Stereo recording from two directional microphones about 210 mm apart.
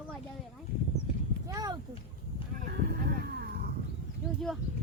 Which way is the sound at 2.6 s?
50° right (ahead or behind).